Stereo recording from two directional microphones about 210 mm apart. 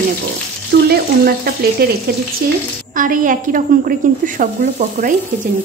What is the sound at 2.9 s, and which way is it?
A woman's voice, 40° right (ahead or behind).